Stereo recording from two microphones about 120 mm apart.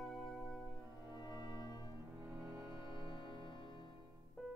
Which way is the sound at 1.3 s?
35° left (ahead or behind).